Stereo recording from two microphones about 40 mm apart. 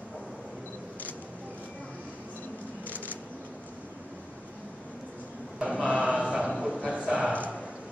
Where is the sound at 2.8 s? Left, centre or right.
Left.